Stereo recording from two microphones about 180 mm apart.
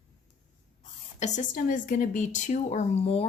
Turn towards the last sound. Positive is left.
turn(degrees=35)  # may be behind; listen again after turning